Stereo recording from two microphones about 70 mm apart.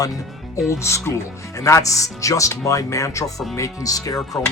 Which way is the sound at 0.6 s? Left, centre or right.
Left.